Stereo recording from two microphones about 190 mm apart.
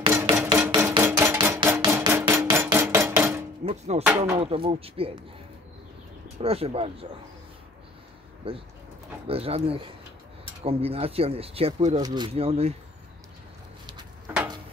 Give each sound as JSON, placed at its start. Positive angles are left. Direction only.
{"t": 0.1, "sound": "hammer", "side_deg": -15}
{"t": 1.2, "sound": "a sound", "side_deg": -10}
{"t": 1.6, "sound": "hammer", "side_deg": -15}
{"t": 3.2, "sound": "dishes", "side_deg": -15}
{"t": 3.6, "sound": "music", "side_deg": -35}
{"t": 4.4, "sound": "speech", "side_deg": -30}
{"t": 6.4, "sound": "speech", "side_deg": -30}
{"t": 8.5, "sound": "speech", "side_deg": -30}
{"t": 12.0, "sound": "speech", "side_deg": -25}
{"t": 14.2, "sound": "a sound", "side_deg": -10}